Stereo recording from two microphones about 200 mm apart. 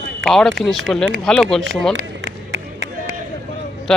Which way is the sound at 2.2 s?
70° right (ahead or behind).